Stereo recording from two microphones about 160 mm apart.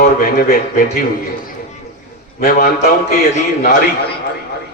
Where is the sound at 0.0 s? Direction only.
65° left (ahead or behind).